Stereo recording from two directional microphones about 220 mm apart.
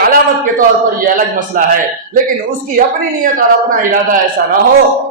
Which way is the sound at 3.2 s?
40° right (ahead or behind).